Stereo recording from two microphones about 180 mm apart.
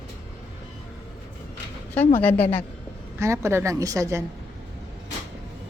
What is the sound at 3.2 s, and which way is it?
A woman's voice, 15° right (ahead or behind).